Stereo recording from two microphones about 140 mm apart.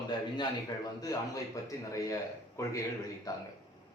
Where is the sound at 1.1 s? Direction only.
25° left (ahead or behind).